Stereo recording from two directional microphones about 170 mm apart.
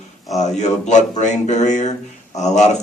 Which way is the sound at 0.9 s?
45° left (ahead or behind).